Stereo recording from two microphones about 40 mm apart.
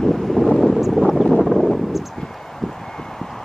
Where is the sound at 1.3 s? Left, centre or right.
Centre.